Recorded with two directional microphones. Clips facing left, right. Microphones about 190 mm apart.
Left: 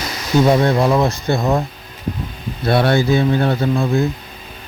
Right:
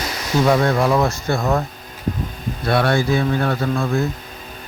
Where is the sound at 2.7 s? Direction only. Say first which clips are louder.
Left 3 dB; 30° left (ahead or behind).